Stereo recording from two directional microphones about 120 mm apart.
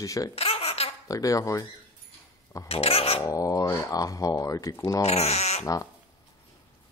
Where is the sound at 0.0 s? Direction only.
30° left (ahead or behind).